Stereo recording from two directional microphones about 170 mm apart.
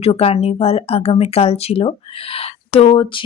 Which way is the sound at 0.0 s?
35° left (ahead or behind).